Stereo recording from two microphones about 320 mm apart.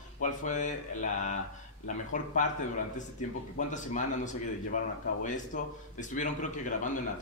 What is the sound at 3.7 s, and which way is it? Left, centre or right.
Speech, left.